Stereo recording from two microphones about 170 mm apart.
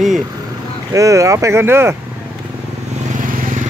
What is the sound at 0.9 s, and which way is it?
Speech, 20° right (ahead or behind).